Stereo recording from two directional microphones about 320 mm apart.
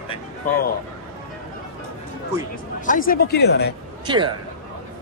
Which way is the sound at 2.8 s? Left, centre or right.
Left.